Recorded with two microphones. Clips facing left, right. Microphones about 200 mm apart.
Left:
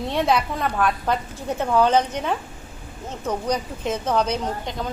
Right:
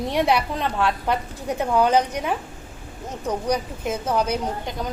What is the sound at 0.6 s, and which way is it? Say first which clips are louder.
Speech: left 1 dB; 25° right (ahead or behind).